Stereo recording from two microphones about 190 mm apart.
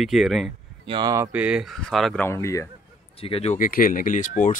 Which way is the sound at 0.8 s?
25° right (ahead or behind).